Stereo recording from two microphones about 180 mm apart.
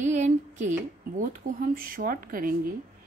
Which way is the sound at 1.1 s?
50° right (ahead or behind).